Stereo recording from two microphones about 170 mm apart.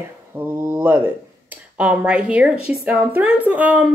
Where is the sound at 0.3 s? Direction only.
10° right (ahead or behind).